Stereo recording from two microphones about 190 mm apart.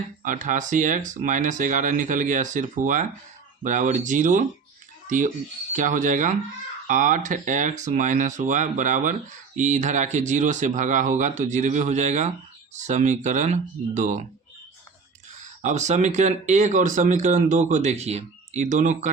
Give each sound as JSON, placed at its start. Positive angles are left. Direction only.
{"t": 0.2, "sound": "speech", "side_deg": -45}
{"t": 15.6, "sound": "speech", "side_deg": -40}